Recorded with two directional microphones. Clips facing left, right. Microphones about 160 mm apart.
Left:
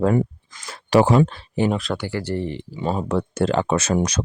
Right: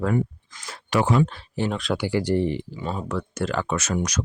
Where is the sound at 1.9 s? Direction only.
15° right (ahead or behind).